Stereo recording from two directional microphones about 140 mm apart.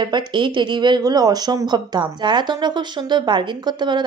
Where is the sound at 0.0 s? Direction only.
35° right (ahead or behind).